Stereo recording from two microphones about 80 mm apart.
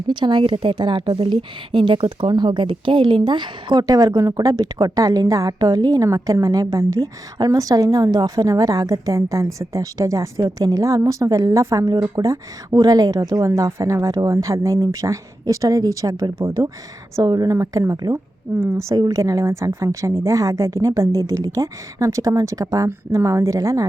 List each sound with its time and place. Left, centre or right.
0.1 s a woman's voice: right
13.4 s a woman's voice: right
17.4 s a woman's voice: right
18.9 s a woman's voice: right
19.2 s a woman's voice: right